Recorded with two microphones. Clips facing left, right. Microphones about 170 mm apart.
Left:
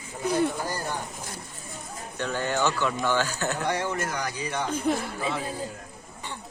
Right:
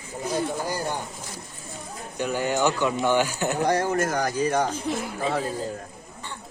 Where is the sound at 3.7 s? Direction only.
40° right (ahead or behind).